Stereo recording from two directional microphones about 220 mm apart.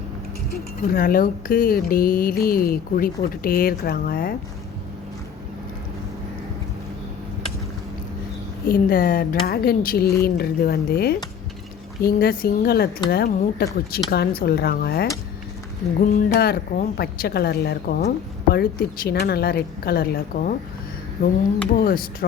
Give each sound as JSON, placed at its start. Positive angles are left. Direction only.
{"t": 0.5, "sound": "speech", "side_deg": 40}
{"t": 8.6, "sound": "a woman's voice", "side_deg": 40}